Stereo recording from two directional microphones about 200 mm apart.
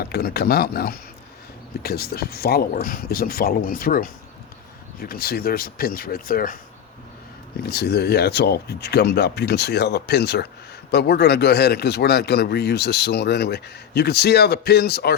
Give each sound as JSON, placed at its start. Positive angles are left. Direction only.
{"t": 0.0, "sound": "speech", "side_deg": 50}
{"t": 7.7, "sound": "speech", "side_deg": 55}